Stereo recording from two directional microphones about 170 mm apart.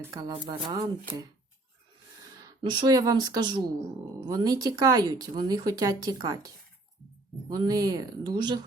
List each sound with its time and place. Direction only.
0.0 s speech: 20° right (ahead or behind)
2.6 s speech: 25° right (ahead or behind)
7.5 s speech: 25° right (ahead or behind)